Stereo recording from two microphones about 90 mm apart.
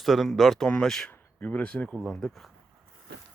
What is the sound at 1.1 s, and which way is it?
Speech, 20° left (ahead or behind).